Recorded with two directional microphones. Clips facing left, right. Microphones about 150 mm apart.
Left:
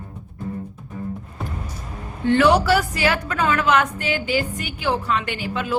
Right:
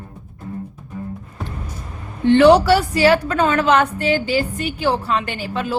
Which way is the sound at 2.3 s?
30° right (ahead or behind).